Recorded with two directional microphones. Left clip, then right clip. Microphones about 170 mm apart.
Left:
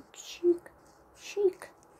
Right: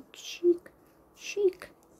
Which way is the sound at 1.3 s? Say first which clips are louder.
Right 1 dB; 30° right (ahead or behind).